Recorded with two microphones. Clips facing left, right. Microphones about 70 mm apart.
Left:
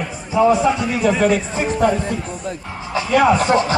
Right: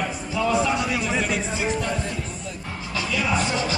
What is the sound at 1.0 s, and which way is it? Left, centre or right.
A man's voice, left.